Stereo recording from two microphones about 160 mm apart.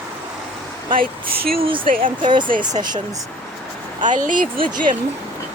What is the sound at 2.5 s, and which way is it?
Speech, 55° right (ahead or behind).